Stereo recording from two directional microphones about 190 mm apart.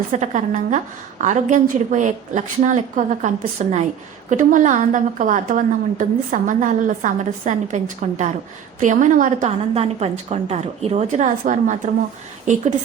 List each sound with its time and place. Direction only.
0.1 s a woman's voice: 40° right (ahead or behind)